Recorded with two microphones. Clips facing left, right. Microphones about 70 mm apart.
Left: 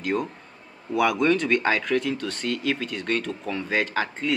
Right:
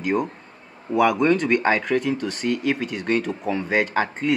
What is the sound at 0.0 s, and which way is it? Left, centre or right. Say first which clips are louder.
Speech: right 3 dB; centre.